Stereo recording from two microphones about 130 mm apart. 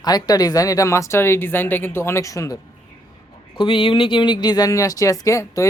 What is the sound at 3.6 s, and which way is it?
Speech, 40° left (ahead or behind).